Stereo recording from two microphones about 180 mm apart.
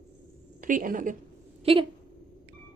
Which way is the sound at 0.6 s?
45° right (ahead or behind).